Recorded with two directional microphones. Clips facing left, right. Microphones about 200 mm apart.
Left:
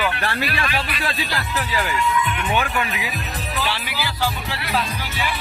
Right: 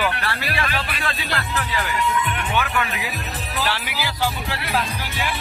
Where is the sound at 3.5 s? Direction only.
10° right (ahead or behind).